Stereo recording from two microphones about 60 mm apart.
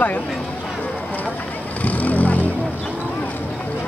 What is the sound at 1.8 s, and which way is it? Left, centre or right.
Vehicle, left.